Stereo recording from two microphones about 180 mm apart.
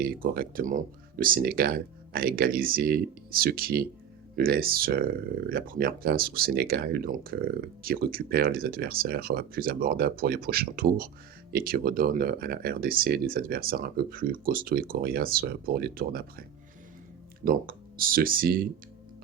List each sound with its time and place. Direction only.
0.0 s speech: 55° right (ahead or behind)
17.4 s speech: 55° right (ahead or behind)